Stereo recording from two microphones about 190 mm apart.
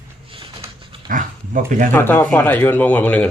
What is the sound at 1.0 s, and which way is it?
Speech, 45° right (ahead or behind).